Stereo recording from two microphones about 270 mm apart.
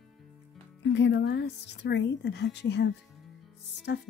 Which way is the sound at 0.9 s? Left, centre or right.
Left.